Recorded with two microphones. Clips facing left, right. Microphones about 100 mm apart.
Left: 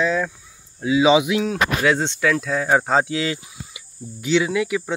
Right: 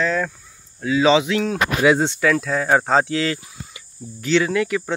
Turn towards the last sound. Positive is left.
turn(degrees=5)  # may be behind; listen again after turning